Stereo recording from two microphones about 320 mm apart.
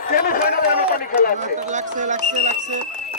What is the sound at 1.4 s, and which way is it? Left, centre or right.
Speech, right.